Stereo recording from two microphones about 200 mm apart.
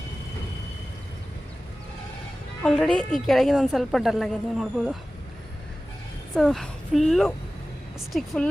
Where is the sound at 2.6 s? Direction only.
5° left (ahead or behind).